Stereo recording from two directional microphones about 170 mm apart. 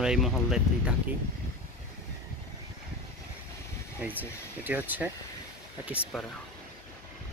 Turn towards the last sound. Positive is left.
turn(degrees=0)  # may be behind; listen again after turning